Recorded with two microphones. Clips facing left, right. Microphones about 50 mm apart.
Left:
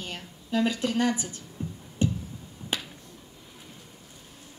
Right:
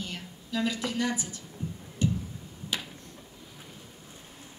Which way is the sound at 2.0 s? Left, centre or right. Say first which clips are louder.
Left 1 dB; left.